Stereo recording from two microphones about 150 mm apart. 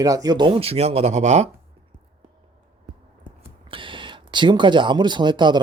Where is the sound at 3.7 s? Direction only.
35° right (ahead or behind).